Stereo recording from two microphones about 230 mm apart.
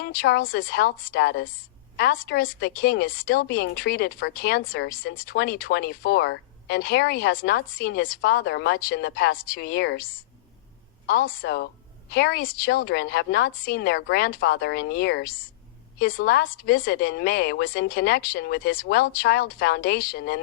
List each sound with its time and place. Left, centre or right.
0.0 s a woman's voice: left